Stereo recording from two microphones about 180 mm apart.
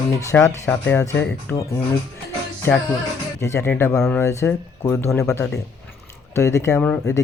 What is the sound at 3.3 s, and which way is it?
Speech, 15° left (ahead or behind).